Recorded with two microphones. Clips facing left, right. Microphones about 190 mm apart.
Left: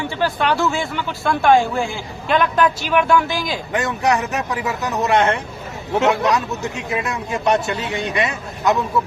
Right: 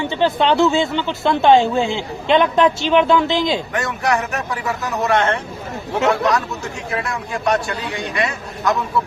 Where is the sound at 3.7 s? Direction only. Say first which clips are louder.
Left 1 dB; 20° left (ahead or behind).